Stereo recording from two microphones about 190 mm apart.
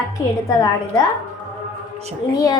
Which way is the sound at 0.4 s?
20° left (ahead or behind).